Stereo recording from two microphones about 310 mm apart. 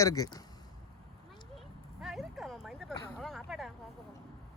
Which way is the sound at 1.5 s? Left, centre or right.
Centre.